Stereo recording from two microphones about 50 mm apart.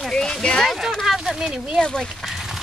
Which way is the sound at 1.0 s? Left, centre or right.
Centre.